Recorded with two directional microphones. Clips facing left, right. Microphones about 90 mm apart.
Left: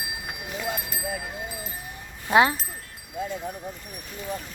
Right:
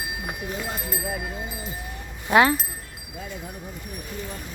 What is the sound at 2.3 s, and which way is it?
Speech, 20° left (ahead or behind).